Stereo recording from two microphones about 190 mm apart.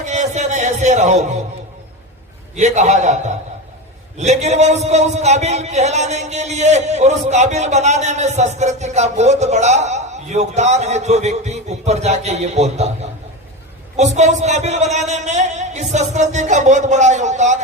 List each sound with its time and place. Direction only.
0.0 s a man's voice: 40° right (ahead or behind)
2.6 s a man's voice: 40° right (ahead or behind)